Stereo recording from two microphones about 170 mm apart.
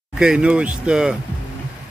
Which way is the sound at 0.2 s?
5° right (ahead or behind).